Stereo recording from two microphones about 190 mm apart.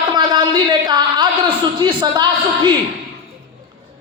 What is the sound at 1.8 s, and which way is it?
Speech, 25° right (ahead or behind).